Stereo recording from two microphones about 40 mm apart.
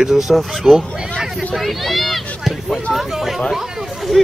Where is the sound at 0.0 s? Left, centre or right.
Centre.